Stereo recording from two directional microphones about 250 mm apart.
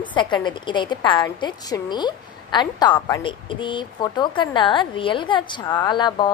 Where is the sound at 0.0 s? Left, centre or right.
Centre.